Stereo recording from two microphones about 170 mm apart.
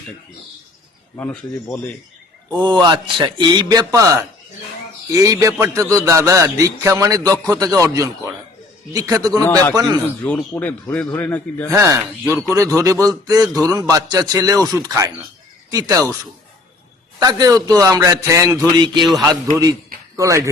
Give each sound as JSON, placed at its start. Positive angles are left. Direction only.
{"t": 1.1, "sound": "a man's voice", "side_deg": 10}
{"t": 2.6, "sound": "a man's voice", "side_deg": -25}
{"t": 10.2, "sound": "a man's voice", "side_deg": 10}
{"t": 11.7, "sound": "a man's voice", "side_deg": -20}
{"t": 17.2, "sound": "a man's voice", "side_deg": -20}